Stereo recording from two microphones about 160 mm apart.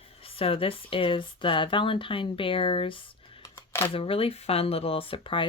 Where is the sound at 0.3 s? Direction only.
35° left (ahead or behind).